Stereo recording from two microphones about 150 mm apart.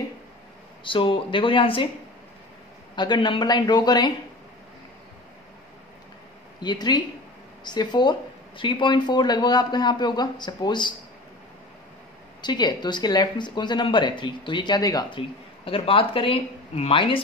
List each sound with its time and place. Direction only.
0.8 s speech: 35° left (ahead or behind)
3.0 s speech: 30° left (ahead or behind)
6.6 s speech: 30° left (ahead or behind)
12.4 s speech: 30° left (ahead or behind)